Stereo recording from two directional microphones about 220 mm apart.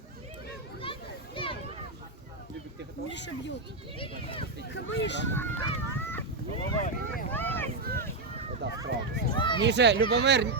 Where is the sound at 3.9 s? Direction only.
25° left (ahead or behind).